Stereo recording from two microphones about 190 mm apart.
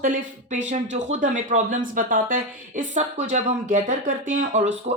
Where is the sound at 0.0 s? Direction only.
40° right (ahead or behind).